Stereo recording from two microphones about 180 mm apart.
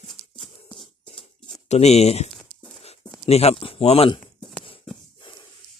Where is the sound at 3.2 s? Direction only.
35° left (ahead or behind).